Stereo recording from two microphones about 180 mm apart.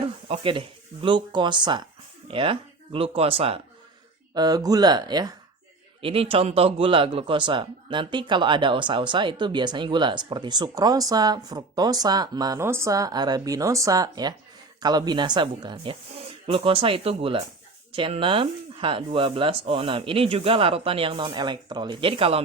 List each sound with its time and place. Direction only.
0.3 s a man's voice: 30° right (ahead or behind)
4.4 s a man's voice: 20° right (ahead or behind)